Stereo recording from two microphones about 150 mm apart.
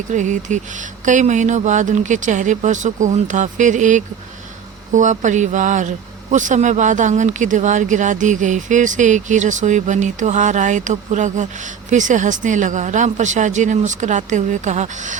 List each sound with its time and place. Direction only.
0.1 s speech: 55° right (ahead or behind)